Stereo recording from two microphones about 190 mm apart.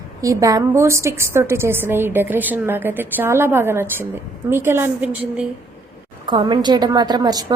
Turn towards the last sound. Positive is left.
turn(degrees=-20)  # may be behind; listen again after turning